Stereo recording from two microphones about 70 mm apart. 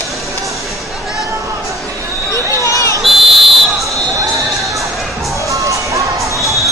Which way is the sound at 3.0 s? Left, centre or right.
Centre.